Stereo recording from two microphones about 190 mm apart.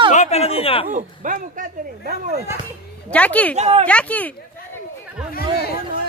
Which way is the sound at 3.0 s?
5° left (ahead or behind).